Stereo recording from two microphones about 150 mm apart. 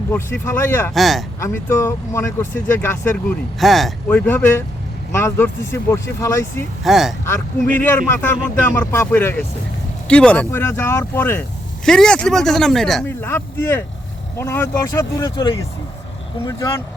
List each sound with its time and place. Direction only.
0.1 s speech: 15° left (ahead or behind)
0.9 s speech: centre (ahead or behind)
1.4 s speech: 20° left (ahead or behind)
3.6 s speech: centre (ahead or behind)
4.1 s speech: 10° left (ahead or behind)
6.8 s speech: centre (ahead or behind)
7.8 s speech: 15° left (ahead or behind)
13.1 s speech: 15° left (ahead or behind)
16.5 s speech: 20° left (ahead or behind)